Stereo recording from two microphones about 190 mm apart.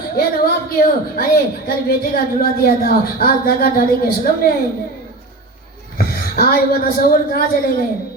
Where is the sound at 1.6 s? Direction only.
50° left (ahead or behind).